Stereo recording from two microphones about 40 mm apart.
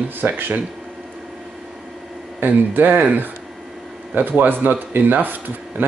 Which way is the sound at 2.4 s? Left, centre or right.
Right.